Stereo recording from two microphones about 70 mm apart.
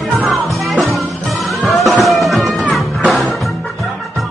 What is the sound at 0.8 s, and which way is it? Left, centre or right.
Music, centre.